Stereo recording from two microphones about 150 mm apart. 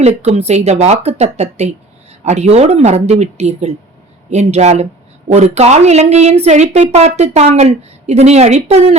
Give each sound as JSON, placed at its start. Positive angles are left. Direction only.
{"t": 0.0, "sound": "a woman's voice", "side_deg": -45}